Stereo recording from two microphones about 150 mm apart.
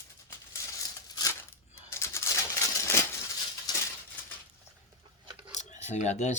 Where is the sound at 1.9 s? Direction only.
20° left (ahead or behind).